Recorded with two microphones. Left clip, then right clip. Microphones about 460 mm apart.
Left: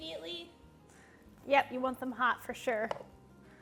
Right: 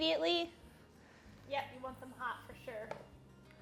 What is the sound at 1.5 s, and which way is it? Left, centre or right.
A woman's voice, left.